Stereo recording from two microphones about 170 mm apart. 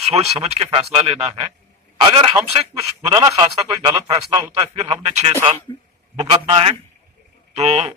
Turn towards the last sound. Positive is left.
turn(degrees=-40)  # may be behind; listen again after turning